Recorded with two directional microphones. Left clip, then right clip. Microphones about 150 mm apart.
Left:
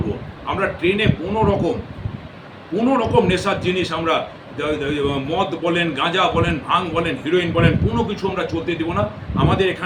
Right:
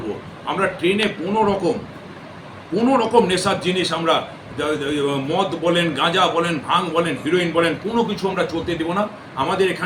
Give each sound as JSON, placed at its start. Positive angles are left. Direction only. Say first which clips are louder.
{"t": 0.4, "sound": "a man's voice", "louder": "even", "side_deg": 10}
{"t": 2.7, "sound": "a man's voice", "louder": "right 1 dB", "side_deg": 10}